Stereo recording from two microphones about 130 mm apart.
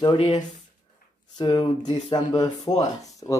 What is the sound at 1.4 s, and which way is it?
Speech, 35° left (ahead or behind).